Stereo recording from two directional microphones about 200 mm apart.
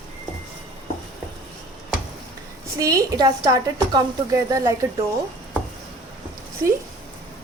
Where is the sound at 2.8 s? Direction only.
15° right (ahead or behind).